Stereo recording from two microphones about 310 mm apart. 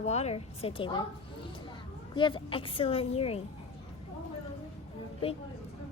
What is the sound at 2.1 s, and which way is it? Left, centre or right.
A woman's voice, centre.